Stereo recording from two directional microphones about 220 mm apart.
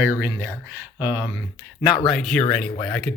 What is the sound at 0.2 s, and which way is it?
Speech, 10° right (ahead or behind).